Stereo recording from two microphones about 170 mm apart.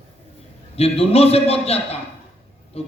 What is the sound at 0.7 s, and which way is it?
A man's voice, 35° left (ahead or behind).